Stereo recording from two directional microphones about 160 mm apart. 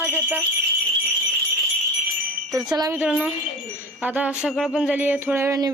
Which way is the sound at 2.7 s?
25° right (ahead or behind).